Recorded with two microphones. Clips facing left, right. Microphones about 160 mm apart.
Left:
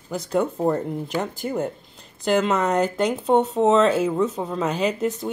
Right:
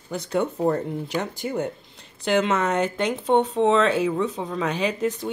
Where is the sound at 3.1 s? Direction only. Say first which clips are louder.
Right 1 dB; centre (ahead or behind).